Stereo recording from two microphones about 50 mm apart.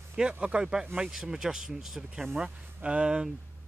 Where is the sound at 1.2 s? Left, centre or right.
Centre.